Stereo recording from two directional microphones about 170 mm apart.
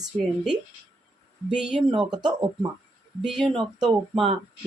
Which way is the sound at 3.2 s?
Centre (ahead or behind).